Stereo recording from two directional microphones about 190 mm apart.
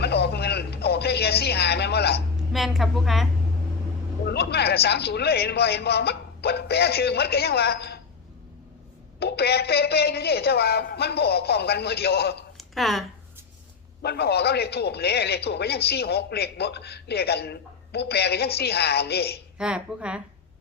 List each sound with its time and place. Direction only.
0.0 s a sound: 60° left (ahead or behind)
2.5 s a woman's voice: centre (ahead or behind)
4.3 s a man's voice: 60° left (ahead or behind)
9.1 s a man's voice: 60° left (ahead or behind)
12.5 s a sound: centre (ahead or behind)
14.0 s a man's voice: 60° left (ahead or behind)
19.5 s a woman's voice: 5° right (ahead or behind)